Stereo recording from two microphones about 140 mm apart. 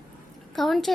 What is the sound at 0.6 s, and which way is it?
Speech, centre (ahead or behind).